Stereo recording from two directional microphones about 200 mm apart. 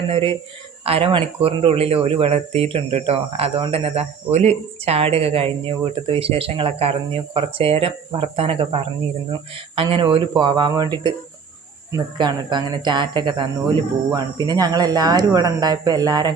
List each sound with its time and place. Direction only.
0.1 s speech: 25° right (ahead or behind)